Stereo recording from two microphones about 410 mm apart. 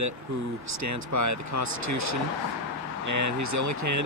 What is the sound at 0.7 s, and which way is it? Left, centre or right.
Speech, right.